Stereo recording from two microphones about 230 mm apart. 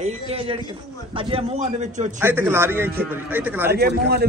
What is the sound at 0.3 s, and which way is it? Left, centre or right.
A man's voice, right.